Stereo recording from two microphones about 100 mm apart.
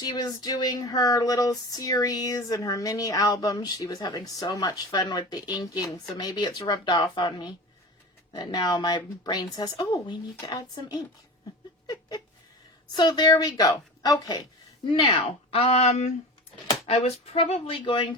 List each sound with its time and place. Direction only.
0.0 s speech: 45° left (ahead or behind)
11.9 s a sound: 40° left (ahead or behind)
12.9 s speech: 45° left (ahead or behind)
15.2 s speech: 75° left (ahead or behind); by 18.2 s 55° left (ahead or behind)